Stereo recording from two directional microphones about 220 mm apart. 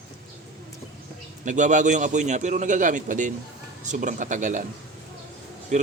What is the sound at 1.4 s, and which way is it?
A man's voice, 35° right (ahead or behind).